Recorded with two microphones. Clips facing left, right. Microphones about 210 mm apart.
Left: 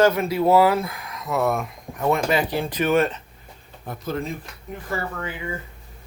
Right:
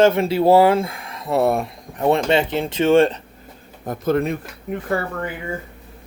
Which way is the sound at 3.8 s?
60° right (ahead or behind).